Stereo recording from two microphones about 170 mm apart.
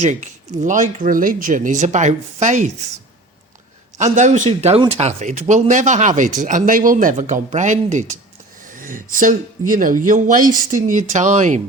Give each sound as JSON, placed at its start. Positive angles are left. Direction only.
{"t": 0.0, "sound": "speech", "side_deg": -45}
{"t": 3.9, "sound": "a man's voice", "side_deg": -45}